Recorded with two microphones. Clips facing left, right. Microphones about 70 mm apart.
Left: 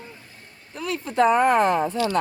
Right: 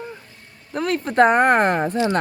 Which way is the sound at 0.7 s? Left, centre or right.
Right.